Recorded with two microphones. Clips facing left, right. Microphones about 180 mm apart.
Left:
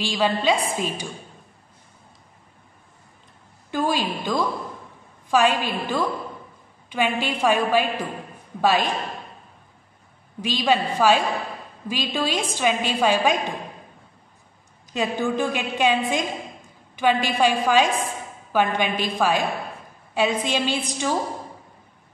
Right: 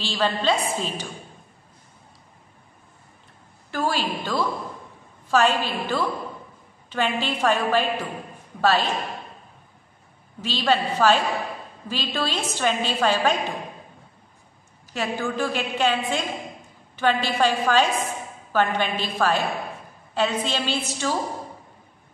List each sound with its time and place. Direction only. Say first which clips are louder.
0.0 s a woman's voice: left 2 dB; 10° left (ahead or behind)
3.7 s a woman's voice: left 2 dB; 15° left (ahead or behind)
10.4 s a woman's voice: left 1 dB; 10° left (ahead or behind)
14.9 s a woman's voice: left 3 dB; 15° left (ahead or behind)